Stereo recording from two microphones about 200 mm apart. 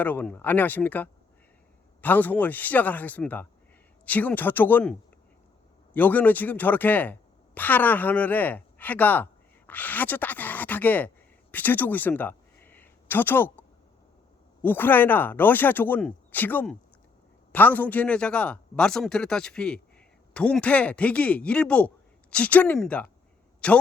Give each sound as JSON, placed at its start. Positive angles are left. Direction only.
{"t": 0.0, "sound": "a man's voice", "side_deg": 10}